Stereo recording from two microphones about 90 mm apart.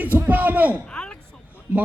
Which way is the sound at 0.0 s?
20° right (ahead or behind).